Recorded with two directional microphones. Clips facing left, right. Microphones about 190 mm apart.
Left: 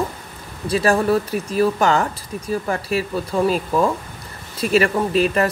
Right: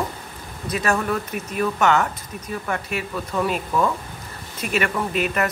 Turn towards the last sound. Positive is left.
turn(degrees=30)  # may be behind; listen again after turning